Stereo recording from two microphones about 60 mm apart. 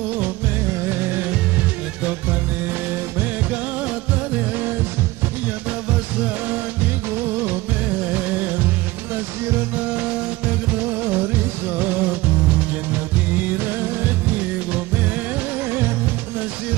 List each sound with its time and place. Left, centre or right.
0.8 s music: right
7.2 s music: right
8.1 s music: right
9.8 s music: right